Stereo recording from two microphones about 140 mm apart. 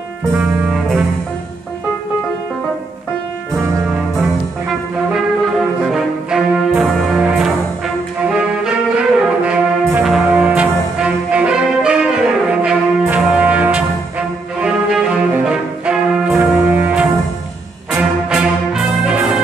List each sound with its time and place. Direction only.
0.4 s music: centre (ahead or behind)
4.2 s music: 5° right (ahead or behind)
8.3 s brass instrument: 5° right (ahead or behind)
12.6 s music: 5° right (ahead or behind)